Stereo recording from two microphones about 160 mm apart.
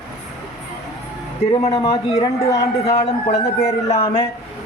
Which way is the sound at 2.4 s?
20° left (ahead or behind).